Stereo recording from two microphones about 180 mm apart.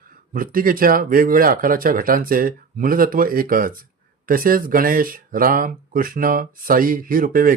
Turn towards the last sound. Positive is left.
turn(degrees=-50)  # may be behind; listen again after turning